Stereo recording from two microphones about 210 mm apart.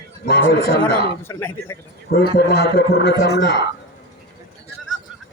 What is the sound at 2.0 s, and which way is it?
A man's voice, 50° left (ahead or behind).